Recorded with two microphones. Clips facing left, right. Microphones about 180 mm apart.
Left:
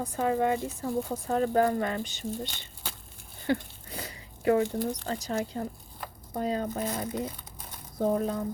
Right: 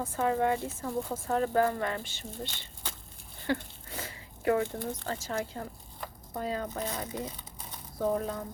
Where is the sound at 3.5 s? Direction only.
15° left (ahead or behind).